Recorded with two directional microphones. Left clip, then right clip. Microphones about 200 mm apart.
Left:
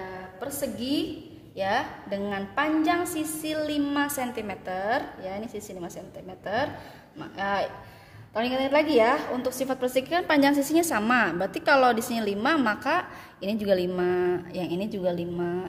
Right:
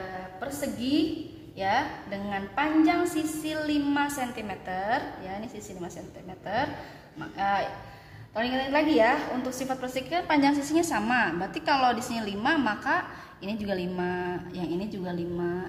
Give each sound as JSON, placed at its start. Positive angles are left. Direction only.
{"t": 0.4, "sound": "a woman's voice", "side_deg": 60}
{"t": 6.4, "sound": "a woman's voice", "side_deg": 60}